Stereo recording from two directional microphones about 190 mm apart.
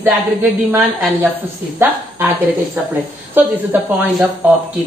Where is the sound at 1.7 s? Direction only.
10° right (ahead or behind).